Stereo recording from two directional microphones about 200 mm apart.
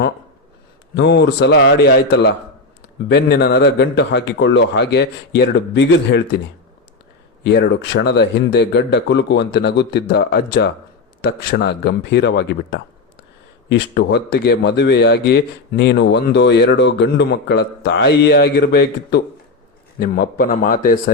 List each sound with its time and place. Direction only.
0.9 s a man's voice: 60° left (ahead or behind)
7.4 s a man's voice: 60° left (ahead or behind)